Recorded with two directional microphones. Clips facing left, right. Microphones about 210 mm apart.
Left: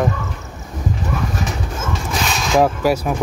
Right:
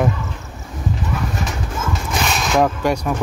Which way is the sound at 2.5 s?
5° left (ahead or behind).